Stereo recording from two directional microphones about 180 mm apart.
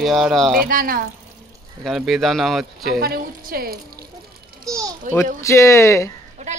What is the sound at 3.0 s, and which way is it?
Speech, 55° right (ahead or behind).